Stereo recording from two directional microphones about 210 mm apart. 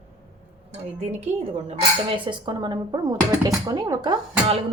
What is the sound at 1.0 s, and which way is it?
Speech, 30° right (ahead or behind).